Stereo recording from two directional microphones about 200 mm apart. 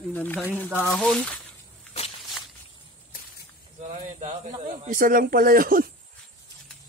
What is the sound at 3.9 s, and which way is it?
Speech, 35° right (ahead or behind).